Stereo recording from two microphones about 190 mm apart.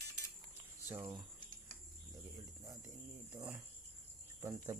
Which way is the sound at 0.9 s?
15° right (ahead or behind).